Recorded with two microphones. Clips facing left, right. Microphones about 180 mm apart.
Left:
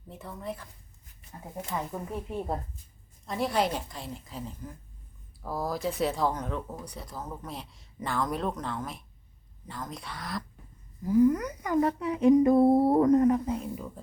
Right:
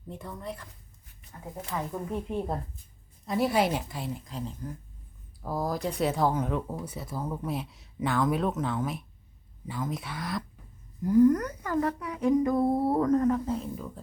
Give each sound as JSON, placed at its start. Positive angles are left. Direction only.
{"t": 0.1, "sound": "speech", "side_deg": 5}
{"t": 1.9, "sound": "speech", "side_deg": 5}